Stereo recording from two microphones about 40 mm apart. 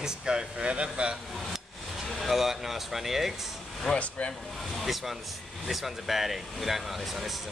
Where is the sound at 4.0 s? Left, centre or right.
Left.